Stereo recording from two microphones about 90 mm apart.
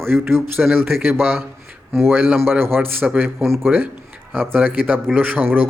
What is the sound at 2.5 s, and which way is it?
A man's voice, 25° right (ahead or behind).